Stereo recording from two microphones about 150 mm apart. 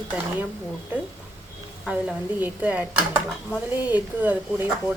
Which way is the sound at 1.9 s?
10° right (ahead or behind).